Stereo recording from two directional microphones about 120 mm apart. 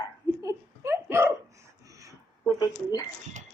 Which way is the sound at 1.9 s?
25° right (ahead or behind).